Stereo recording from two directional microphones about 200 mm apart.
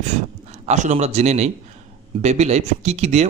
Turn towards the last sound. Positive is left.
turn(degrees=-35)  # may be behind; listen again after turning